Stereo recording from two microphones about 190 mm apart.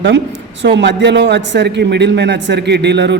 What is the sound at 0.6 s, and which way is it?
A man's voice, 65° right (ahead or behind).